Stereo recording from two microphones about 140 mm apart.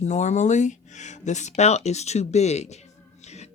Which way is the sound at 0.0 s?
55° left (ahead or behind).